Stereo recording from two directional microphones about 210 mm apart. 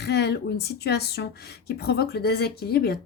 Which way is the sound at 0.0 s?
50° left (ahead or behind).